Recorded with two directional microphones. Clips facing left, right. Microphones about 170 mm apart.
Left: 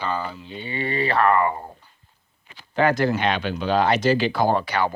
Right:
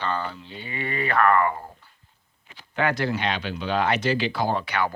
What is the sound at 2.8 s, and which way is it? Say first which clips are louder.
Speech: left 5 dB; 40° left (ahead or behind).